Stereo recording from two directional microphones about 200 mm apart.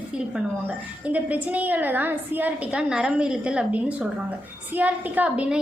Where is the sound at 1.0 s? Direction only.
10° right (ahead or behind).